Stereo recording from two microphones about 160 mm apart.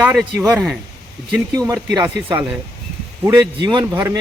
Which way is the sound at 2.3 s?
10° right (ahead or behind).